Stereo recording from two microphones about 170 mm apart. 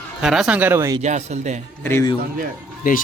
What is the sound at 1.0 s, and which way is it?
Speech, 45° right (ahead or behind).